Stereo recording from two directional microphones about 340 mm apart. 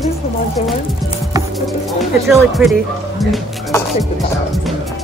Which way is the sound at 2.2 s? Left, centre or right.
Centre.